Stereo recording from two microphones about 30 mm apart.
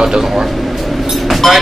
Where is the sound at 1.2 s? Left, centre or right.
Centre.